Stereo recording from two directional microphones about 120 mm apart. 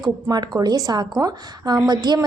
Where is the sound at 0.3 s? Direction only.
35° right (ahead or behind).